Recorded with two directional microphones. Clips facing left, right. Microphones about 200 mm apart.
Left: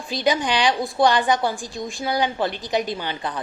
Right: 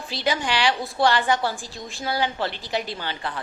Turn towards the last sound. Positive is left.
turn(degrees=20)  # may be behind; listen again after turning